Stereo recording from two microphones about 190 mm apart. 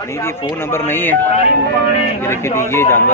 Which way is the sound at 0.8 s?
10° left (ahead or behind).